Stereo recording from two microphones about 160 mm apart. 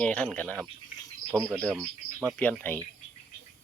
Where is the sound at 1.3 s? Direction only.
15° right (ahead or behind).